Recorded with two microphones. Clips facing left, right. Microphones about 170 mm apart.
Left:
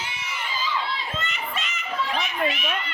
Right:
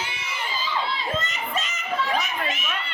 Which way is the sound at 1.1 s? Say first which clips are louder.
Right 3 dB; 40° right (ahead or behind).